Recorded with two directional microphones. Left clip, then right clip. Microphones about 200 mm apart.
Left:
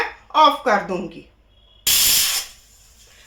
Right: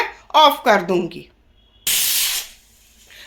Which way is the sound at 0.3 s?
50° right (ahead or behind).